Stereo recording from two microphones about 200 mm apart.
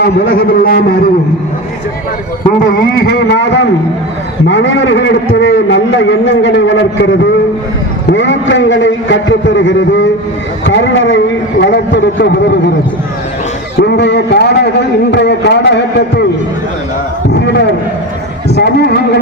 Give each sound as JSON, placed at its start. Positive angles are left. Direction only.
{"t": 0.0, "sound": "speech", "side_deg": 45}
{"t": 2.7, "sound": "a man's voice", "side_deg": 55}
{"t": 13.7, "sound": "a man's voice", "side_deg": 60}
{"t": 18.4, "sound": "a sound", "side_deg": 55}